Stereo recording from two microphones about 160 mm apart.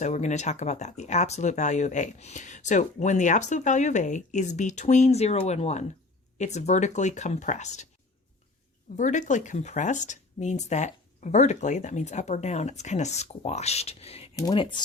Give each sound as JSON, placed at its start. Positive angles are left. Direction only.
{"t": 0.0, "sound": "speech", "side_deg": 45}
{"t": 9.0, "sound": "speech", "side_deg": 50}
{"t": 14.3, "sound": "speech", "side_deg": 25}